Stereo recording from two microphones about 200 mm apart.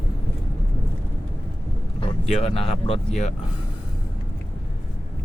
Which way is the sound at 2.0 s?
30° left (ahead or behind).